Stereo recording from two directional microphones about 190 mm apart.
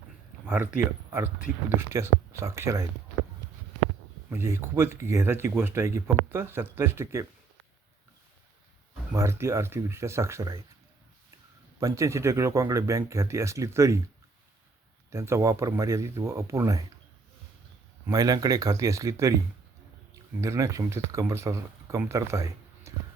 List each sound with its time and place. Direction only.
0.4 s speech: 10° right (ahead or behind)
4.3 s speech: 15° right (ahead or behind)
9.1 s speech: 15° right (ahead or behind)
11.8 s speech: 15° right (ahead or behind)
15.1 s speech: 15° right (ahead or behind)
18.0 s speech: 20° right (ahead or behind)
20.4 s speech: 15° right (ahead or behind)